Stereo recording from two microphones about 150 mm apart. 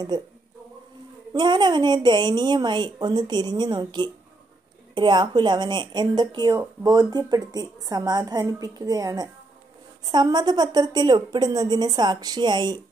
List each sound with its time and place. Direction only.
0.1 s a woman's voice: 30° right (ahead or behind)
1.3 s a woman's voice: 30° right (ahead or behind)